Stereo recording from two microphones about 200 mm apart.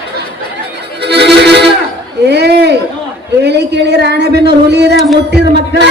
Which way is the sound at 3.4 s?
55° right (ahead or behind).